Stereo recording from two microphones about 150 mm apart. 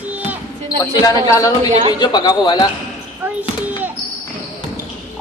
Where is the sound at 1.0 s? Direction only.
20° left (ahead or behind).